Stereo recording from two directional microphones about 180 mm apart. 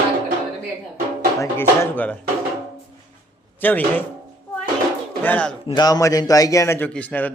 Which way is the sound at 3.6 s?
10° left (ahead or behind).